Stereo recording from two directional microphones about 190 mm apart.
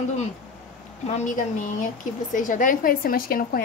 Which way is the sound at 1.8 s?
45° left (ahead or behind).